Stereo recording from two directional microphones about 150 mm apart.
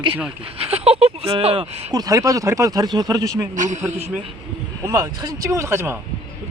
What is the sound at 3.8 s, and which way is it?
A man's voice, 15° right (ahead or behind).